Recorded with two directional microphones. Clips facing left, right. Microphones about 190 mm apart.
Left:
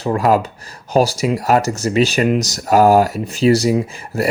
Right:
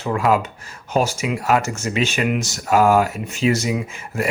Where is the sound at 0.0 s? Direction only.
40° left (ahead or behind).